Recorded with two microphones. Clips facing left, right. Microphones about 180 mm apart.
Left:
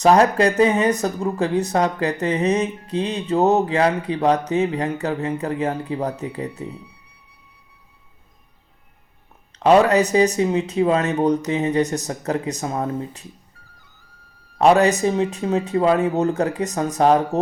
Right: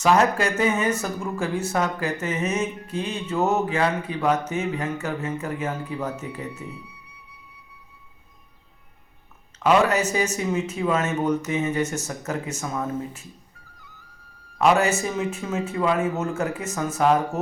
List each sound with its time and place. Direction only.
0.0 s speech: 35° left (ahead or behind)
9.6 s speech: 35° left (ahead or behind)
14.6 s speech: 35° left (ahead or behind)